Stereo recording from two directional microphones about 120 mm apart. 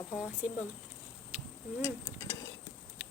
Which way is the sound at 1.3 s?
15° right (ahead or behind).